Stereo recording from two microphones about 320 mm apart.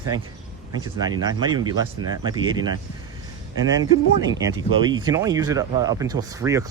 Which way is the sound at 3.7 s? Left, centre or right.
Centre.